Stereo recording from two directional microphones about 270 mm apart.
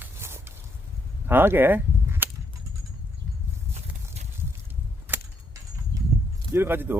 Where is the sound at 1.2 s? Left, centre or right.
Centre.